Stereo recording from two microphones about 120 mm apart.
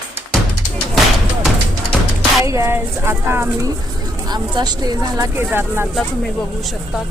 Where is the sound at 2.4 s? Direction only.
25° right (ahead or behind).